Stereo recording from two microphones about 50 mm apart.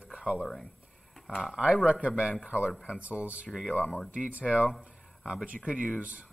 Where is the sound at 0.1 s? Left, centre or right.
Centre.